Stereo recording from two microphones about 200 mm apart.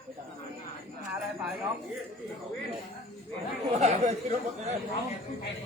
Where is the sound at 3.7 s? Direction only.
35° right (ahead or behind).